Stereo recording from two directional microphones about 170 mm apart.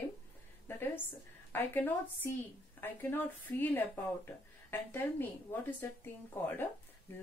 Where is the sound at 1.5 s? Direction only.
10° left (ahead or behind).